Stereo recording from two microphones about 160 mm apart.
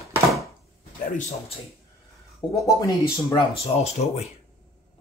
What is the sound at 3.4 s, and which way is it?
Speech, 40° left (ahead or behind).